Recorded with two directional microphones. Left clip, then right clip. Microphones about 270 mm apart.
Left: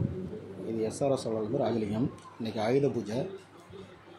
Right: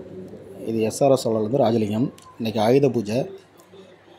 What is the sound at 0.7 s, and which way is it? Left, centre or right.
A man's voice, right.